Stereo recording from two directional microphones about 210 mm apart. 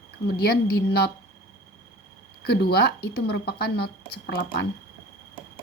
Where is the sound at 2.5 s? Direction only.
50° left (ahead or behind).